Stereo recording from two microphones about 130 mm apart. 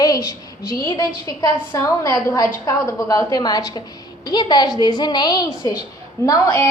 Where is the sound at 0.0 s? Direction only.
30° left (ahead or behind).